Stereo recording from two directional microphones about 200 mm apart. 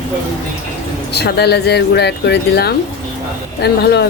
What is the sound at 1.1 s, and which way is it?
Speech, 55° left (ahead or behind).